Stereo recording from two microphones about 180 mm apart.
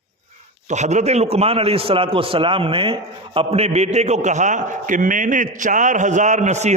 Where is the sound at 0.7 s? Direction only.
40° right (ahead or behind).